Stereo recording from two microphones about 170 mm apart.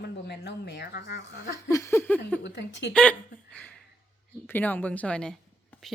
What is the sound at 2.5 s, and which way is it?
Speech, 85° left.